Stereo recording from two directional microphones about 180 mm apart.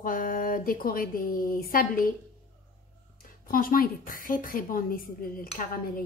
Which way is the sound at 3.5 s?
50° left (ahead or behind).